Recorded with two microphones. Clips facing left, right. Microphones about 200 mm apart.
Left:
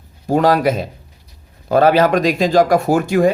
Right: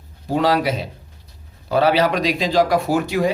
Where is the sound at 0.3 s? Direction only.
50° left (ahead or behind).